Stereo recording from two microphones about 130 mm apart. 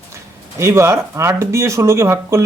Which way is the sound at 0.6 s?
20° right (ahead or behind).